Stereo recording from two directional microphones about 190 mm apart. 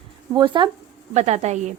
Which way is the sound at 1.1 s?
35° right (ahead or behind).